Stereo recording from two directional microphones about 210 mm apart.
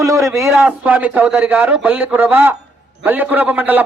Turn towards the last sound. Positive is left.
turn(degrees=-10)  # may be behind; listen again after turning